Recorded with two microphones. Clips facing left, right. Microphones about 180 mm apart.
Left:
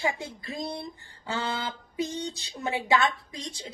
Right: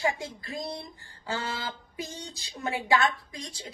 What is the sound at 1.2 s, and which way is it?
A woman's voice, 25° left (ahead or behind).